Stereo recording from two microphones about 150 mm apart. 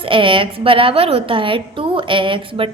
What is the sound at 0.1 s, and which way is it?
A woman's voice, 35° right (ahead or behind).